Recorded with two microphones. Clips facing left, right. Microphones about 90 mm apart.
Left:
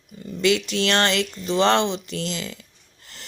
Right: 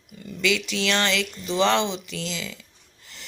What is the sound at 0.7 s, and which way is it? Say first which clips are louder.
Speech: left 3 dB; 45° left (ahead or behind).